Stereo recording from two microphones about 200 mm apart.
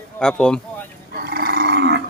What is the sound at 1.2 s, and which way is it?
Dog, 50° right (ahead or behind).